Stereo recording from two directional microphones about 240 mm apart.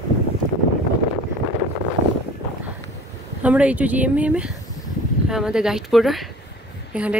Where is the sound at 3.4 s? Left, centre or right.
Centre.